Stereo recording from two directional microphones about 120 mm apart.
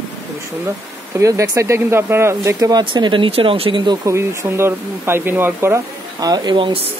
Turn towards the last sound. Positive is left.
turn(degrees=-40)  # may be behind; listen again after turning